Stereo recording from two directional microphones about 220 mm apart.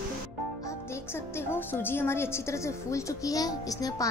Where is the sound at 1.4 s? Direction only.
10° left (ahead or behind).